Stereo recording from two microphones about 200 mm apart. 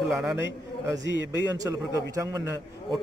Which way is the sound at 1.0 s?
60° left (ahead or behind).